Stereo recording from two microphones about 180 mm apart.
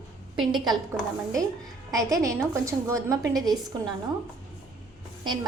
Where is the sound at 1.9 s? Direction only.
20° right (ahead or behind).